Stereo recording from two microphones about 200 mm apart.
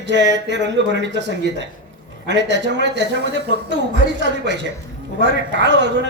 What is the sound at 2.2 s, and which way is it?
Speech, 60° right (ahead or behind).